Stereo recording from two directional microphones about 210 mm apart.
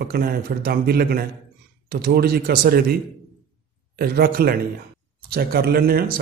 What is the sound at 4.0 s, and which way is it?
Speech, 45° right (ahead or behind).